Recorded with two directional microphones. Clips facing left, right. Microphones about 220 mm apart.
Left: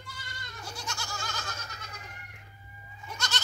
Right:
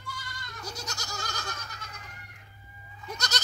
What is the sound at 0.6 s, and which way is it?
Goat, 40° right (ahead or behind).